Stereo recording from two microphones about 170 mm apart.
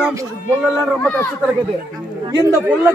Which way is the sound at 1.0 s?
10° left (ahead or behind).